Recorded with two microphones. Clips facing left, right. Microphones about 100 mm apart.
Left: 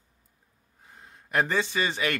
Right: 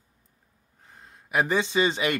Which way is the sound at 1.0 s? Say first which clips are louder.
Right 1 dB; 10° right (ahead or behind).